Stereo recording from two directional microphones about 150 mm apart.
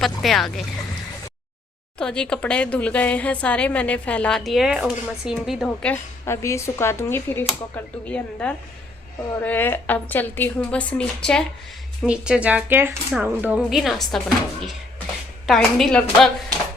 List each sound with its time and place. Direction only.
0.0 s a woman's voice: centre (ahead or behind)
2.0 s a woman's voice: 5° left (ahead or behind)
5.6 s a woman's voice: 10° left (ahead or behind)
12.0 s a woman's voice: 5° right (ahead or behind)
14.6 s a sound: 5° left (ahead or behind)
15.4 s a woman's voice: centre (ahead or behind)